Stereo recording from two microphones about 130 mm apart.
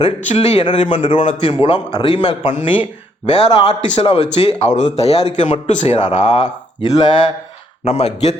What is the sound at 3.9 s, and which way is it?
A man's voice, 50° left (ahead or behind).